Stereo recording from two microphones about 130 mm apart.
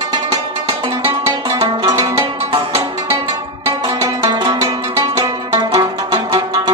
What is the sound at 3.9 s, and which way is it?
Music, 30° right (ahead or behind).